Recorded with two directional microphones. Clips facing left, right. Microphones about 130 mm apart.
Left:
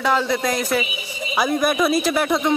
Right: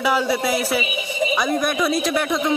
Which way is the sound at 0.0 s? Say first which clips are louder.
Even; 10° right (ahead or behind).